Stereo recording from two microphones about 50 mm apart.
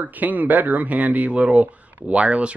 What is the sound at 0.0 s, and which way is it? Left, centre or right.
Speech, right.